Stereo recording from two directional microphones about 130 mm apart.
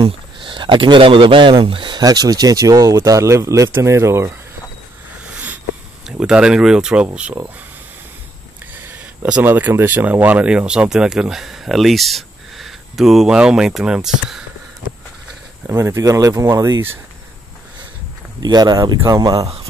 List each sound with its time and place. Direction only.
0.0 s speech: 40° right (ahead or behind); by 4.3 s 20° right (ahead or behind)
5.3 s a sound: 10° right (ahead or behind)
6.0 s speech: 5° right (ahead or behind)
8.8 s speech: 15° right (ahead or behind)
15.6 s speech: 20° right (ahead or behind)
18.4 s speech: 30° right (ahead or behind)